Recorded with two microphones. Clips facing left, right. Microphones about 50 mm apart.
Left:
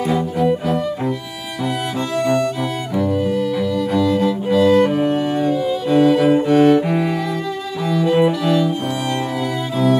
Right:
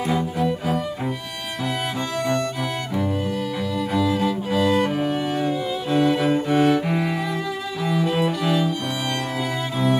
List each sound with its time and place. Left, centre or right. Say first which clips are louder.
0.0 s cello: left 4 dB; centre
2.2 s music: left 6 dB; left
3.0 s cello: left 8 dB; centre